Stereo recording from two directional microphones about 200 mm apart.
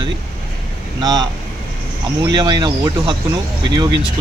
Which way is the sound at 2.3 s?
20° right (ahead or behind).